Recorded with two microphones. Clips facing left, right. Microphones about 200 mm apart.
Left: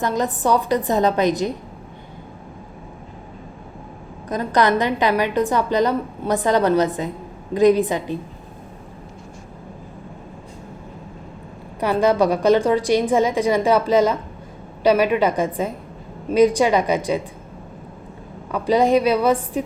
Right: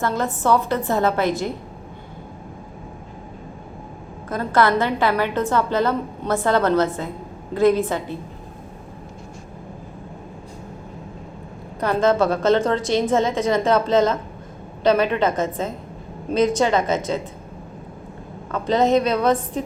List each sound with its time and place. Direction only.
0.0 s a woman's voice: 15° left (ahead or behind)
4.3 s a woman's voice: 15° left (ahead or behind)
11.8 s a woman's voice: 15° left (ahead or behind)
18.5 s a woman's voice: 10° left (ahead or behind)